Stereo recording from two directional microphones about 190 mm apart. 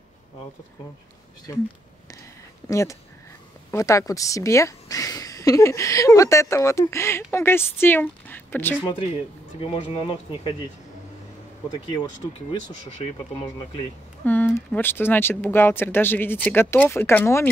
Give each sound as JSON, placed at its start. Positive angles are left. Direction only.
{"t": 2.7, "sound": "a woman's voice", "side_deg": 15}
{"t": 9.6, "sound": "speech", "side_deg": 25}
{"t": 11.7, "sound": "speech", "side_deg": 20}
{"t": 14.2, "sound": "a woman's voice", "side_deg": 10}